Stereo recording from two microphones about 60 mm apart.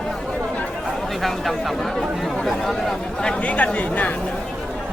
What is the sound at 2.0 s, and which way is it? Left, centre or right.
Speech, centre.